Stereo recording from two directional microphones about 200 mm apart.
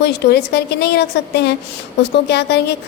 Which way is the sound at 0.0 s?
55° left (ahead or behind).